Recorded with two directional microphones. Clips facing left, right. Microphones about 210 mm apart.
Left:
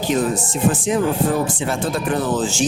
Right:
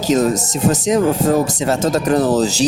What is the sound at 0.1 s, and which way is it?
A man's voice, 40° right (ahead or behind).